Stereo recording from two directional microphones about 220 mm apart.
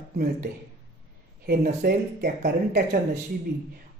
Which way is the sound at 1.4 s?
45° right (ahead or behind).